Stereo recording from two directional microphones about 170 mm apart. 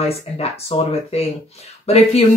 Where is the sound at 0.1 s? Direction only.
35° left (ahead or behind).